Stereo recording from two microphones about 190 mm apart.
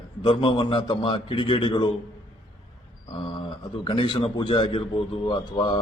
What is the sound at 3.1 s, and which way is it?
A man's voice, 25° left (ahead or behind).